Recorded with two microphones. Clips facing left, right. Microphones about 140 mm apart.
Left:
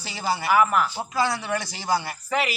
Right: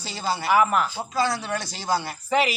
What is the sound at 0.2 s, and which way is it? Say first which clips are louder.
Speech: even; 10° left (ahead or behind).